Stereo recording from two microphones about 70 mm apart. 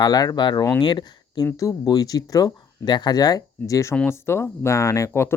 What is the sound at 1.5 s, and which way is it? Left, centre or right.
Speech, left.